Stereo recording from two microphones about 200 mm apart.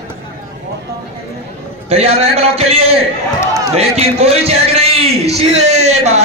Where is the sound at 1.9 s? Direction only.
30° right (ahead or behind).